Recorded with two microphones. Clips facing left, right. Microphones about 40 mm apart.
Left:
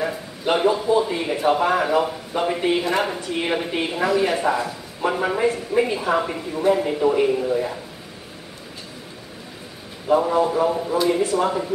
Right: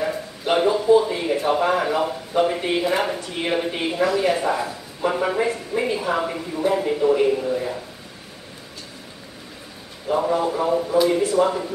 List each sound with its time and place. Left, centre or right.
0.0 s a man's voice: centre
10.0 s a man's voice: centre